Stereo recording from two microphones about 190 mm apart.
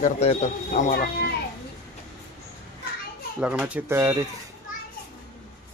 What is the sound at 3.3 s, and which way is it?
Speech, 5° right (ahead or behind).